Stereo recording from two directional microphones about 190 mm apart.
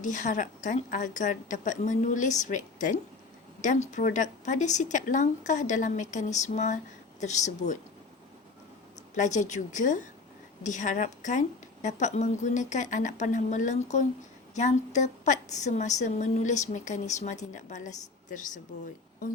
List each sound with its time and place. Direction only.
0.0 s a woman's voice: 40° left (ahead or behind)
9.1 s a woman's voice: 40° left (ahead or behind)